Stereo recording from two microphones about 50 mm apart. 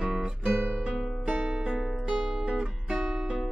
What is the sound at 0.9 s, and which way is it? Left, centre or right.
Music, centre.